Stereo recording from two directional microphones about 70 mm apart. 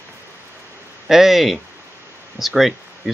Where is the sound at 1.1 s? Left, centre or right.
Centre.